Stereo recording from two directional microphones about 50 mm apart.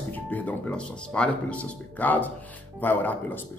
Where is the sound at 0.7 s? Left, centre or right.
Left.